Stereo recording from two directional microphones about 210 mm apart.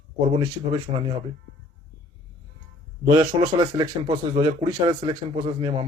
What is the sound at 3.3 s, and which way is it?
Speech, 20° right (ahead or behind).